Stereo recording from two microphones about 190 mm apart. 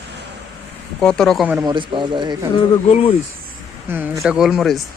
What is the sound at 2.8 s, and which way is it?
Speech, 30° left (ahead or behind).